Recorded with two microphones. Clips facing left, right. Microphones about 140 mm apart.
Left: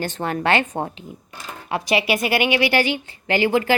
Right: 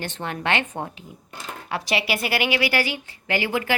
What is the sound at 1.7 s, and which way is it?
A woman's voice, 20° left (ahead or behind).